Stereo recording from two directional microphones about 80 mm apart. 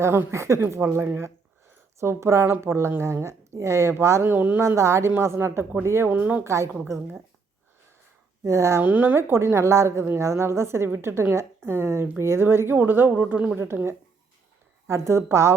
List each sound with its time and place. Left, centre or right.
0.0 s a woman's voice: right
4.6 s a woman's voice: right
6.4 s a woman's voice: right
8.4 s a woman's voice: right
8.8 s a woman's voice: right